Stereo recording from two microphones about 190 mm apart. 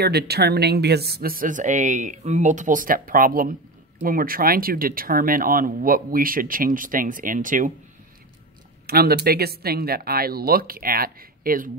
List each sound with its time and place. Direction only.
0.0 s speech: 55° right (ahead or behind)
8.8 s speech: 55° right (ahead or behind)